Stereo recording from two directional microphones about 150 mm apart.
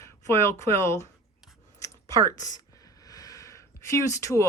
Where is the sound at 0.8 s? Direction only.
20° left (ahead or behind).